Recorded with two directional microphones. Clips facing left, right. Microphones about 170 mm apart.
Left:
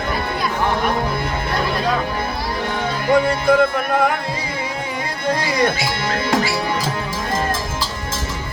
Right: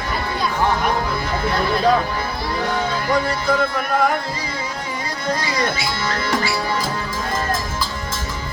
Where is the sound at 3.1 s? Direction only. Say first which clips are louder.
Left 6 dB; 55° left (ahead or behind).